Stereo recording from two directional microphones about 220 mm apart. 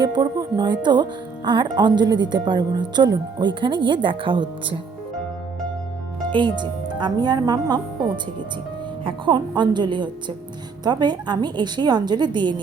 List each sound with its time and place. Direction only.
0.0 s speech: 20° right (ahead or behind)
6.3 s speech: 20° right (ahead or behind)